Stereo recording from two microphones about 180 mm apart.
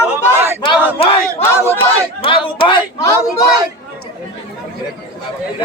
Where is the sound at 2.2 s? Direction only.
30° left (ahead or behind).